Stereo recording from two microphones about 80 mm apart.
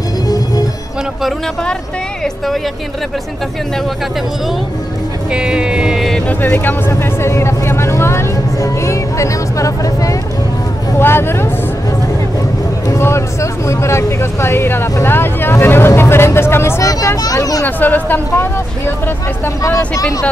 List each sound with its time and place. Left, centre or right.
2.2 s a woman's voice: centre
5.3 s speech: centre
6.2 s speech: left
6.9 s speech: left
11.0 s speech: left
12.8 s speech: left
17.6 s speech: left
20.0 s speech: left